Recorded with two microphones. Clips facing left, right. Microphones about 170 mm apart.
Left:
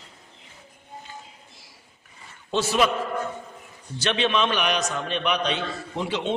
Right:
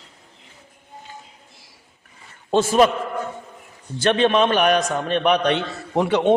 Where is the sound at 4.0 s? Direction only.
50° right (ahead or behind).